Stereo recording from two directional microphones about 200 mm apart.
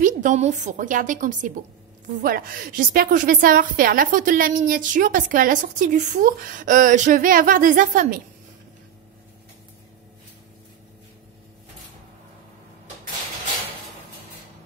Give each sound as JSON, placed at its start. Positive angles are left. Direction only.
{"t": 0.0, "sound": "a woman's voice", "side_deg": -35}